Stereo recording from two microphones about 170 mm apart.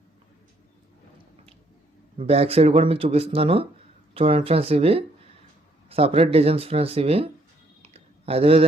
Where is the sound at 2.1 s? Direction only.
35° right (ahead or behind).